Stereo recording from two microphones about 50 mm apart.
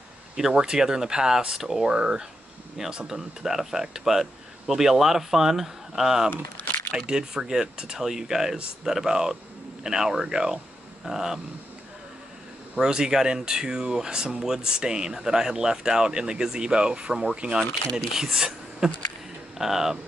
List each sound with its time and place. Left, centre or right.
0.4 s speech: centre
12.7 s speech: centre